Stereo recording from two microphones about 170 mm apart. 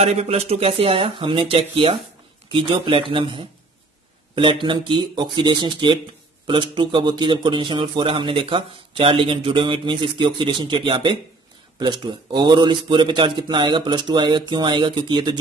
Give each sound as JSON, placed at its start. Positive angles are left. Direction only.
{"t": 0.0, "sound": "a man's voice", "side_deg": -40}